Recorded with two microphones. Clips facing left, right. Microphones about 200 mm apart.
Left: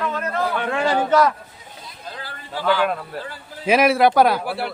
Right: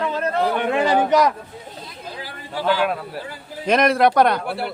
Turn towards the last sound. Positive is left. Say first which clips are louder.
# even
turn(degrees=0)  # may be behind; listen again after turning